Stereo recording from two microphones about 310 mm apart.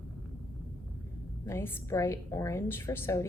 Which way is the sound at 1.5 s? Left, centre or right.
Centre.